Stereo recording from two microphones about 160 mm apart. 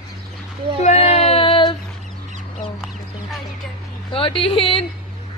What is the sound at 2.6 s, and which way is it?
Chicken, centre (ahead or behind).